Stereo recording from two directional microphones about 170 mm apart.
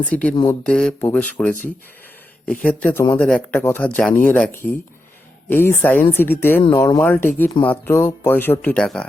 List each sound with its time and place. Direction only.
0.0 s speech: 10° left (ahead or behind)
0.4 s a sound: 5° left (ahead or behind)
1.0 s speech: 10° left (ahead or behind)